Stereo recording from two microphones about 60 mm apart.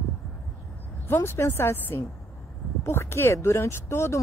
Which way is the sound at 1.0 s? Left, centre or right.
Left.